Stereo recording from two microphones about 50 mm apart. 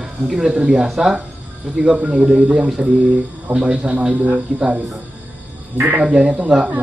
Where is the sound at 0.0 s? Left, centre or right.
Centre.